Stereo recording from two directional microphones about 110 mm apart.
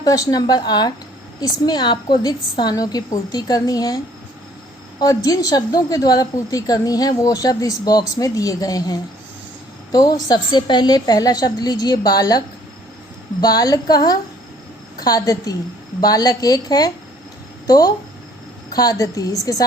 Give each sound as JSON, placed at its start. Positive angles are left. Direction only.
{"t": 0.0, "sound": "a woman's voice", "side_deg": 35}
{"t": 13.4, "sound": "a woman's voice", "side_deg": 35}